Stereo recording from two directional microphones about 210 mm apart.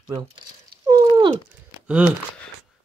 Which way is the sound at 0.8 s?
15° right (ahead or behind).